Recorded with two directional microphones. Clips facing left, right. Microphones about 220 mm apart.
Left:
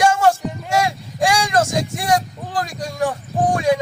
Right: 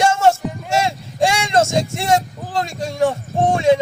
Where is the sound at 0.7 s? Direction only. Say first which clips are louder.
Even; 25° right (ahead or behind).